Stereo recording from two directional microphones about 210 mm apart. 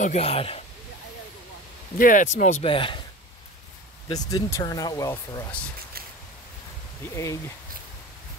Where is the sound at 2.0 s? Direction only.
40° left (ahead or behind).